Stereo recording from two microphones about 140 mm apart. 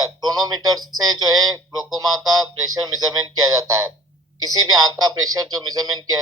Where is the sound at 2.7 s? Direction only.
30° right (ahead or behind).